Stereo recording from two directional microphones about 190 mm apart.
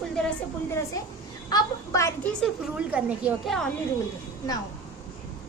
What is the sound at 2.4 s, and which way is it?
A woman's voice, 5° right (ahead or behind).